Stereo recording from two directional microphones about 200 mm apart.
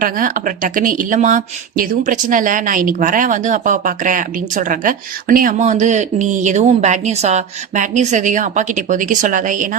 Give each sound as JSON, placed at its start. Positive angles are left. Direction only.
{"t": 0.0, "sound": "speech", "side_deg": -45}